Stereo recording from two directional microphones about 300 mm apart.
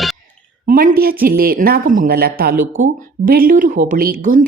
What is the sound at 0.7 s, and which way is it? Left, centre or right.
A man's voice, right.